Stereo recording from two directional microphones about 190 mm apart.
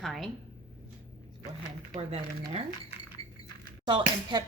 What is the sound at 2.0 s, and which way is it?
Speech, 30° right (ahead or behind).